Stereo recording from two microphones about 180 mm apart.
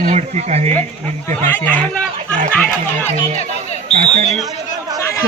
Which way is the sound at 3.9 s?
35° right (ahead or behind).